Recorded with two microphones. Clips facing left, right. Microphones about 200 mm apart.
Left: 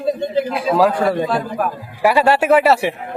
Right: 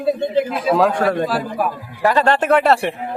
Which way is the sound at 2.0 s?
10° left (ahead or behind).